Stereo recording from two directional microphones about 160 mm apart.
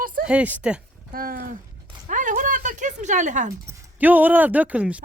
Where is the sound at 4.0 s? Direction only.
10° right (ahead or behind).